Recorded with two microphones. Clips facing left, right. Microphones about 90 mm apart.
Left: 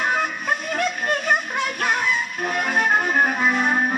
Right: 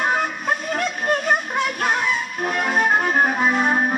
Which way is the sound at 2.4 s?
40° right (ahead or behind).